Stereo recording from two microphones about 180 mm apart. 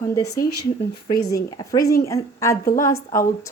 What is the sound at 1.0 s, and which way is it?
Speech, 20° left (ahead or behind).